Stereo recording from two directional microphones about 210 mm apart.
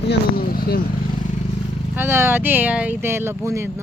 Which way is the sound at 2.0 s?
10° right (ahead or behind).